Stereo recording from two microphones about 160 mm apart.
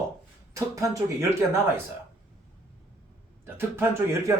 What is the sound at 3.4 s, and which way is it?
Speech, 15° right (ahead or behind).